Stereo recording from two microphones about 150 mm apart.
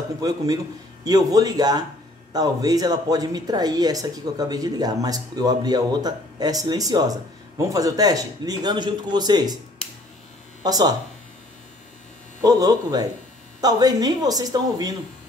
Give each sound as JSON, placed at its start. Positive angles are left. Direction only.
{"t": 0.2, "sound": "speech", "side_deg": -25}
{"t": 10.6, "sound": "speech", "side_deg": -25}
{"t": 12.4, "sound": "speech", "side_deg": -25}